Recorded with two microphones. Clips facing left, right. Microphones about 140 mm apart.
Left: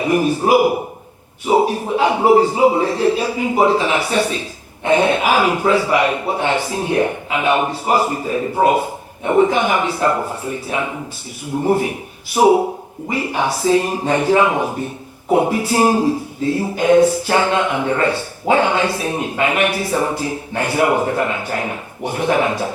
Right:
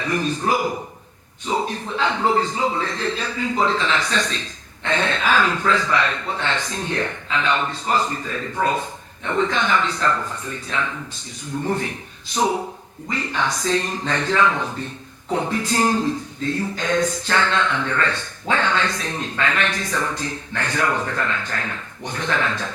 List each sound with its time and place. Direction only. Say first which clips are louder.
0.0 s a man's voice: left 7 dB; 15° left (ahead or behind)